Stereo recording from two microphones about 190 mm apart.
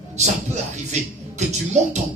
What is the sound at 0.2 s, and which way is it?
Speech, 35° right (ahead or behind).